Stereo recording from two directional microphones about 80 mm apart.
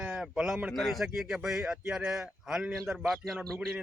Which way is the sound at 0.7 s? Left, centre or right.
Centre.